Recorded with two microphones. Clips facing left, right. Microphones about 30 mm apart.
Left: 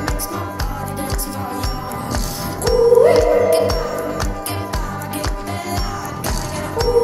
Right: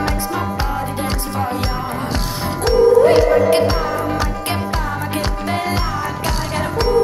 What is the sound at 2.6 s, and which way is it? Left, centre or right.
Music, right.